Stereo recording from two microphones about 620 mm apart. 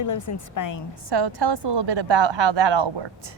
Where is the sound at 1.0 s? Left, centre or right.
Right.